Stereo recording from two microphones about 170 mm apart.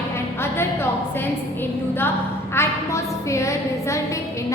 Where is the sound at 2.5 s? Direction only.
15° left (ahead or behind).